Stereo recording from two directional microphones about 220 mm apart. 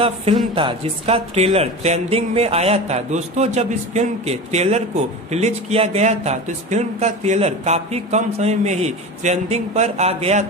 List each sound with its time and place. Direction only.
0.0 s speech: 25° right (ahead or behind)